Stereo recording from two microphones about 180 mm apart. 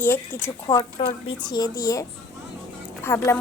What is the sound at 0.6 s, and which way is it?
A woman's voice, 25° left (ahead or behind).